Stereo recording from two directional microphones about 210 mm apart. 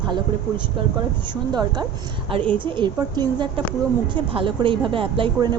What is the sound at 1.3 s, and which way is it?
A woman's voice, 20° right (ahead or behind).